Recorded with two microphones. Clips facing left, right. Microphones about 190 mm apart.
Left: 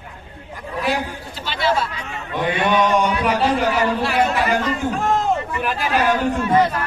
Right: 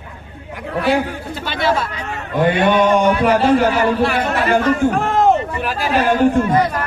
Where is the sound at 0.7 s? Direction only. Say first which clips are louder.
Right 6 dB; 65° right (ahead or behind).